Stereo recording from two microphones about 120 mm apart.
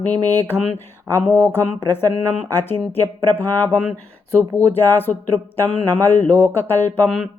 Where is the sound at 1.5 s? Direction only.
20° left (ahead or behind).